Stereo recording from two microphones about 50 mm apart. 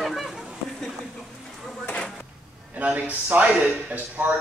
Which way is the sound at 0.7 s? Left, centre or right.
Centre.